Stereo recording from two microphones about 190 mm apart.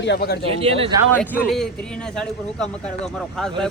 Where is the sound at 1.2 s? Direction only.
10° right (ahead or behind).